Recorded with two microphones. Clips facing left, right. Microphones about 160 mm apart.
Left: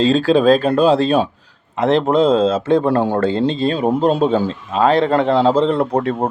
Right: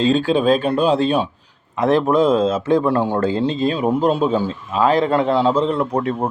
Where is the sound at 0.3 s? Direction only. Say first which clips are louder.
Left 4 dB; 40° left (ahead or behind).